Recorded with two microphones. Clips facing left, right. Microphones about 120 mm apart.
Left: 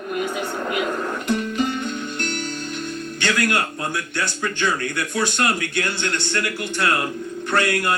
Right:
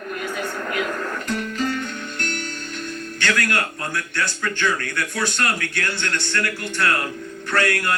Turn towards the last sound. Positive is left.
turn(degrees=20)  # may be behind; listen again after turning